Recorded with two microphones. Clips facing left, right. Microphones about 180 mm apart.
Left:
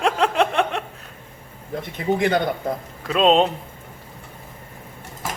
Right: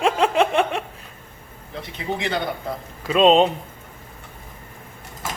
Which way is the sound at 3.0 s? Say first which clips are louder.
Right 2 dB; centre (ahead or behind).